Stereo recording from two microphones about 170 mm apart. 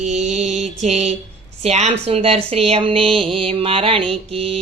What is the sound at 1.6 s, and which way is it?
Speech, 40° right (ahead or behind).